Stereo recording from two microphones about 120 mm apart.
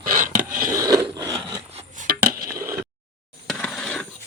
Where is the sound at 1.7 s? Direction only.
60° right (ahead or behind).